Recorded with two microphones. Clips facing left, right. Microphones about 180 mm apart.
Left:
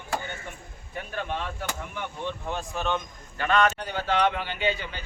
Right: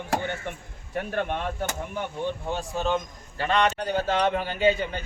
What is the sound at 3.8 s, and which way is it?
Speech, 45° right (ahead or behind).